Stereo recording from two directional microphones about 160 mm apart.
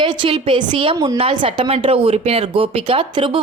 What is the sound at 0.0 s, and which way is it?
A woman's voice, 30° right (ahead or behind).